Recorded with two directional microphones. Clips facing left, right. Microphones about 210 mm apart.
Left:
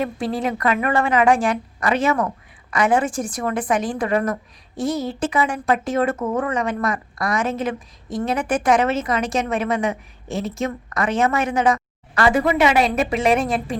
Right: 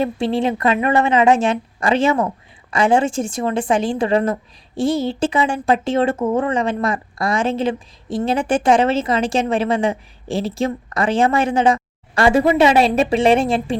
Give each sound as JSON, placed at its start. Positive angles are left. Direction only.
{"t": 0.0, "sound": "speech", "side_deg": -25}